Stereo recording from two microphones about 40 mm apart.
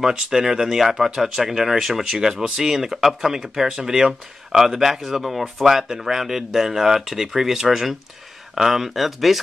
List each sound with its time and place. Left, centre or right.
0.3 s speech: centre